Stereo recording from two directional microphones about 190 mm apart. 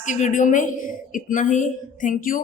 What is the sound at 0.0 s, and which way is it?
A woman's voice, 40° left (ahead or behind).